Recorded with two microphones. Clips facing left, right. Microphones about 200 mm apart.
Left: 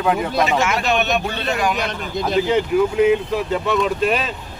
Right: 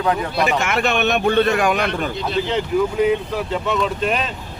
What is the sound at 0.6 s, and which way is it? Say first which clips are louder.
A man's voice: even; 55° right (ahead or behind).